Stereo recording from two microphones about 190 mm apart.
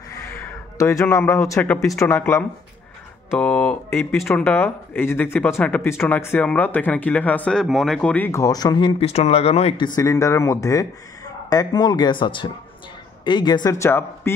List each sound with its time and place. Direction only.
0.4 s speech: 15° left (ahead or behind); by 9.9 s 35° left (ahead or behind)
9.9 s speech: 15° left (ahead or behind)